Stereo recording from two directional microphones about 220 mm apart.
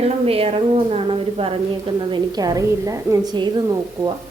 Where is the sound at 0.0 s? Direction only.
25° right (ahead or behind).